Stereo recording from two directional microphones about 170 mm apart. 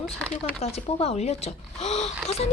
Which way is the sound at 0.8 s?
35° left (ahead or behind).